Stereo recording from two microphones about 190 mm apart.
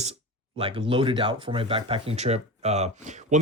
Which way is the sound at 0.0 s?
30° right (ahead or behind).